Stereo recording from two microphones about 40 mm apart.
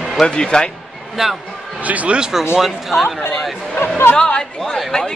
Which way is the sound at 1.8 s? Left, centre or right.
Right.